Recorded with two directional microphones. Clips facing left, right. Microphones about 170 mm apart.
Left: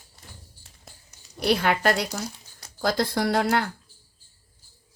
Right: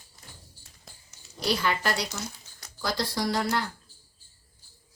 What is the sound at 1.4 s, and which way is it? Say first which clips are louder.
Speech: left 5 dB; 60° left (ahead or behind).